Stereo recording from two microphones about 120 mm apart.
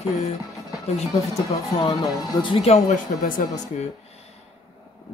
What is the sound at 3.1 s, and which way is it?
Speech, 90° left.